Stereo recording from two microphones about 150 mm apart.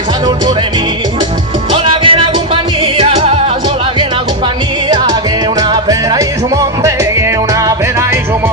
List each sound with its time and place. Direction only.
1.7 s music: 35° right (ahead or behind)
5.5 s music: 25° right (ahead or behind)